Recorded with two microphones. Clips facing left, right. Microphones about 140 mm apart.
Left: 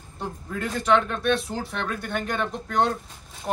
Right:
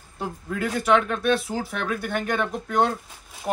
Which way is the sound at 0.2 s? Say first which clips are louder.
Right 3 dB; 5° right (ahead or behind).